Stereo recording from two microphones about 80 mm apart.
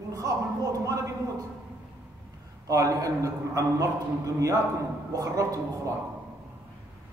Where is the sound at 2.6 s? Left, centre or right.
Right.